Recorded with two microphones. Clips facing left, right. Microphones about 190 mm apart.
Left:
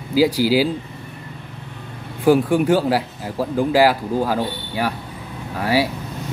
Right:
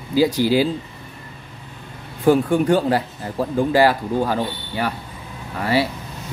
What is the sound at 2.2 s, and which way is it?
Speech, 10° left (ahead or behind).